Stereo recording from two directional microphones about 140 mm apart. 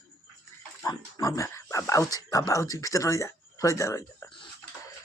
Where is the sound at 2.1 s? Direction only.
25° left (ahead or behind).